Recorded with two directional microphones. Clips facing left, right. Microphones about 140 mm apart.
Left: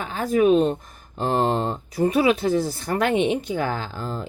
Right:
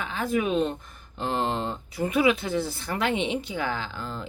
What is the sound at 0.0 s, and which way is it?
A woman's voice, 40° left (ahead or behind).